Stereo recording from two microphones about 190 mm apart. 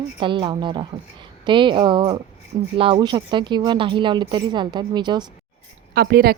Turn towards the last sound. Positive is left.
turn(degrees=-55)  # may be behind; listen again after turning